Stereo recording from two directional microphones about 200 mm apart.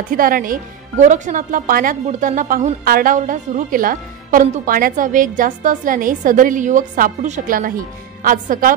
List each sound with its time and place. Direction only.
0.1 s speech: 45° right (ahead or behind)